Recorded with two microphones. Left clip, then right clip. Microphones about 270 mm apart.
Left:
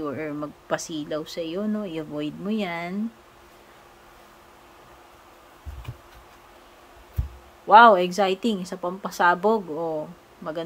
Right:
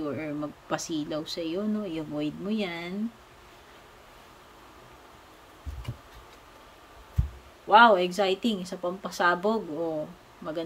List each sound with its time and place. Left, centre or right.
0.0 s speech: centre
7.6 s speech: centre